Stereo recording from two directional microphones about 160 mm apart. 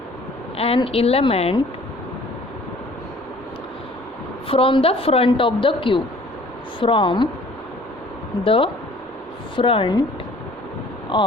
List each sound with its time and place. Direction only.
0.5 s a woman's voice: 40° left (ahead or behind)
4.4 s a woman's voice: 35° left (ahead or behind)
8.4 s a woman's voice: 35° left (ahead or behind)